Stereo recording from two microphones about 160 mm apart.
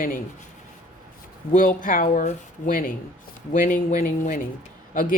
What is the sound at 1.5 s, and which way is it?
A woman's voice, 55° left (ahead or behind).